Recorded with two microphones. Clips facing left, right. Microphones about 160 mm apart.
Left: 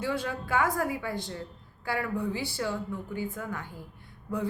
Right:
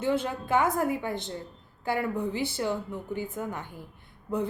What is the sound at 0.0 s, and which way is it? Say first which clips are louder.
A woman's voice: right 4 dB; 20° right (ahead or behind).